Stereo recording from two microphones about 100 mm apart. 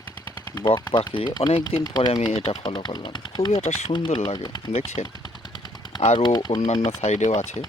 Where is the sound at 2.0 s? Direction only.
50° left (ahead or behind).